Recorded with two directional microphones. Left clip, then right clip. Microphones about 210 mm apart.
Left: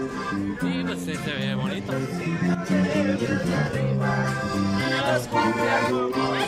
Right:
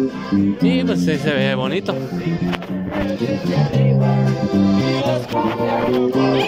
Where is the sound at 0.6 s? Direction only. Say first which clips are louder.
Right 10 dB; 35° right (ahead or behind).